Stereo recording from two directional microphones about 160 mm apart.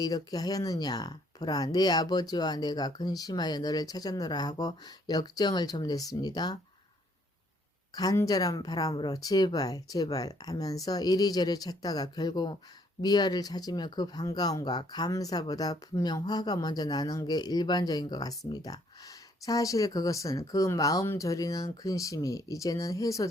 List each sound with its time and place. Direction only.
0.0 s speech: 25° left (ahead or behind)
7.9 s speech: 20° left (ahead or behind)